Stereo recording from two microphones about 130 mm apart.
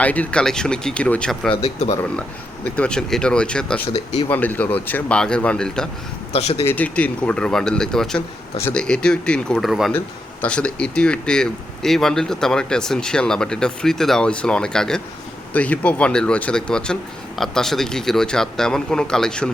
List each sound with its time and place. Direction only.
0.0 s speech: 10° left (ahead or behind)
1.6 s speech: 50° left (ahead or behind)
2.6 s speech: 10° left (ahead or behind)
6.3 s speech: 50° left (ahead or behind)
6.7 s speech: 10° left (ahead or behind)